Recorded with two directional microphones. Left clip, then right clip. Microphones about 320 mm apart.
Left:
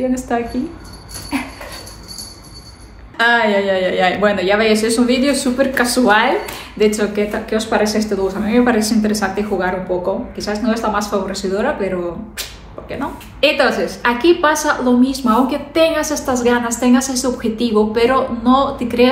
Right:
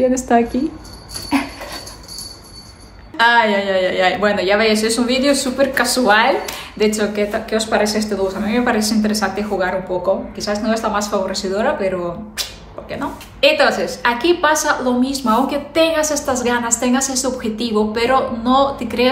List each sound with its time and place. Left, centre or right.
0.3 s a woman's voice: right
1.3 s a sound: right
3.2 s speech: centre
12.9 s speech: centre